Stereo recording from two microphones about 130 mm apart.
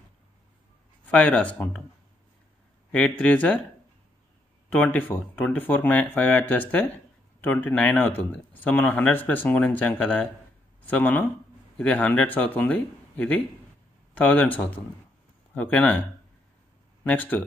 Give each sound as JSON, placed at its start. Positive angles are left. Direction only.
{"t": 1.0, "sound": "speech", "side_deg": 10}
{"t": 2.9, "sound": "speech", "side_deg": 10}
{"t": 4.7, "sound": "speech", "side_deg": 15}
{"t": 17.0, "sound": "speech", "side_deg": 15}